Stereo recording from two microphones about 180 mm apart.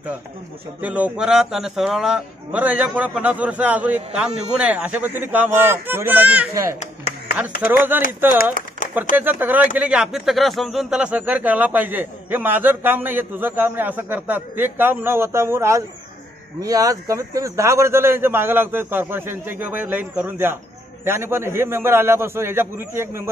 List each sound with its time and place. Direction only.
0.8 s a man's voice: 10° right (ahead or behind)
6.8 s a sound: 40° left (ahead or behind)
7.6 s speech: 10° right (ahead or behind)